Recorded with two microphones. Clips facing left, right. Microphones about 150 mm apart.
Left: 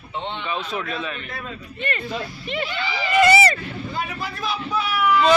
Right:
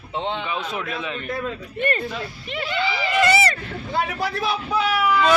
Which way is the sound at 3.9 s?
75° right (ahead or behind).